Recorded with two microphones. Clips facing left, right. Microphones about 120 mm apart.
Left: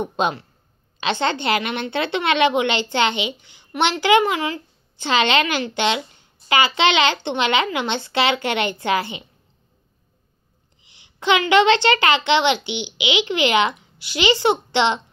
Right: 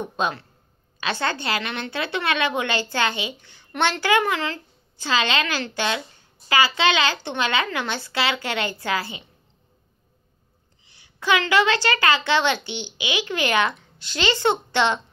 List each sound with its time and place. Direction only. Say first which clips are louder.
0.0 s a woman's voice: left 4 dB; 25° left (ahead or behind)
4.9 s a woman's voice: left 4 dB; 25° left (ahead or behind)
10.8 s a woman's voice: left 4 dB; 20° left (ahead or behind)